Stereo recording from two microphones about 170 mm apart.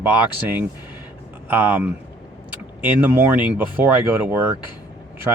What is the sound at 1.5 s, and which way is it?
Speech, 10° right (ahead or behind).